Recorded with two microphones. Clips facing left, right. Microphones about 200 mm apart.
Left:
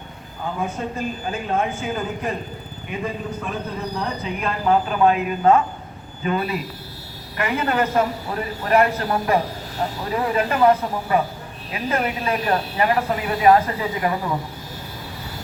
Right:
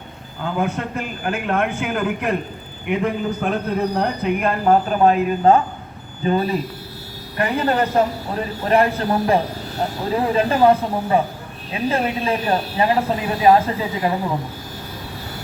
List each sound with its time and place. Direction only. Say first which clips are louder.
0.4 s a man's voice: right 3 dB; 75° right (ahead or behind); by 14.3 s 25° right (ahead or behind)